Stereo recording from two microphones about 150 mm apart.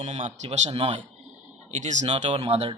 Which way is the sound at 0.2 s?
55° right (ahead or behind).